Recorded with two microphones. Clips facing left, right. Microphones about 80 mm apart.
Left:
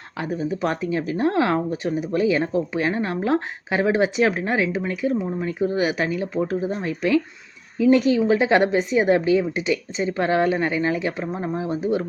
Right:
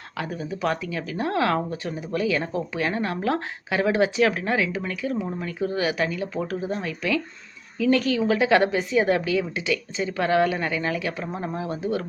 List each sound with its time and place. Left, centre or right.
0.2 s speech: left